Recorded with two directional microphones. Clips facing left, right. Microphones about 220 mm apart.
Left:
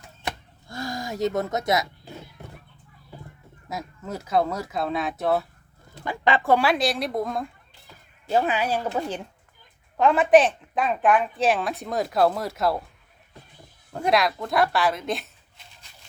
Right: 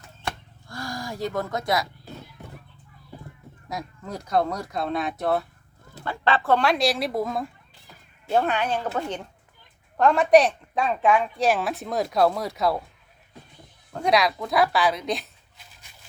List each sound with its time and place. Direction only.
0.3 s a sound: 20° left (ahead or behind)
3.7 s a woman's voice: 5° left (ahead or behind)
6.1 s a woman's voice: 15° left (ahead or behind)
13.9 s speech: centre (ahead or behind)